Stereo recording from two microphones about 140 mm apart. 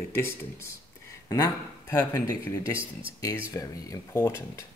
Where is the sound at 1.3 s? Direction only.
20° left (ahead or behind).